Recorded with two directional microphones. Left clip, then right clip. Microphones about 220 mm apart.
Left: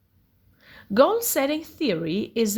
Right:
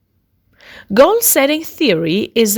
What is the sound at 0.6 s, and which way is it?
A woman's voice, 40° right (ahead or behind).